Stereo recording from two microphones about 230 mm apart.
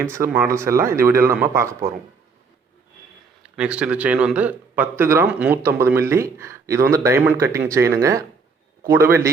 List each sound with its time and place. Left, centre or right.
0.0 s a man's voice: centre
3.4 s a man's voice: centre